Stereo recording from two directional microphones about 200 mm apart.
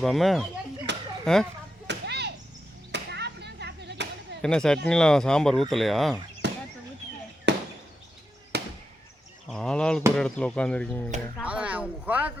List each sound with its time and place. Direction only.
0.0 s speech: centre (ahead or behind)
0.9 s a sound: 60° right (ahead or behind)
1.2 s speech: centre (ahead or behind)
1.9 s a sound: 55° right (ahead or behind)
2.9 s chop: 55° right (ahead or behind)
4.4 s speech: 5° left (ahead or behind)
6.4 s a sound: 60° right (ahead or behind)
7.5 s chop: 60° right (ahead or behind)
8.5 s fireworks: 55° right (ahead or behind)
9.5 s speech: 5° left (ahead or behind)
11.4 s speech: 5° right (ahead or behind)